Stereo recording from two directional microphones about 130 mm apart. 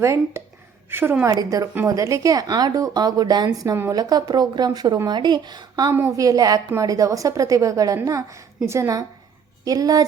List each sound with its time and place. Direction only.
0.0 s a woman's voice: 20° right (ahead or behind)
5.9 s speech: 20° right (ahead or behind)